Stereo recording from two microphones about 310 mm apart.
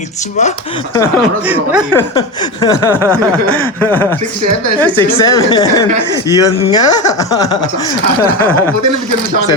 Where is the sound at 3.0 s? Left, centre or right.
Centre.